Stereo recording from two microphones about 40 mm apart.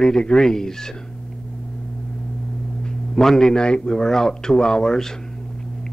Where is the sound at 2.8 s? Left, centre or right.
Centre.